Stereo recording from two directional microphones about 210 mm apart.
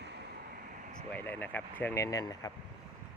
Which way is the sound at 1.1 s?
10° left (ahead or behind).